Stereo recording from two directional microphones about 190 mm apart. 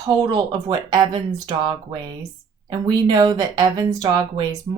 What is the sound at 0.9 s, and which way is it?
A woman's voice, 20° right (ahead or behind).